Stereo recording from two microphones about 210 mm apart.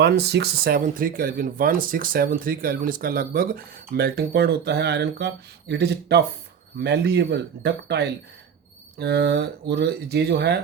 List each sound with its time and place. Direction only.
0.0 s speech: 50° right (ahead or behind)